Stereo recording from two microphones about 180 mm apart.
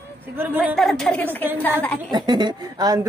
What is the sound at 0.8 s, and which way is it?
A woman's voice, centre (ahead or behind).